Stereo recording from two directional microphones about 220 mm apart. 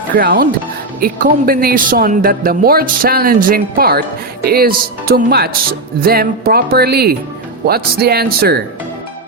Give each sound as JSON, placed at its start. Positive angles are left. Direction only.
{"t": 0.1, "sound": "a man's voice", "side_deg": -40}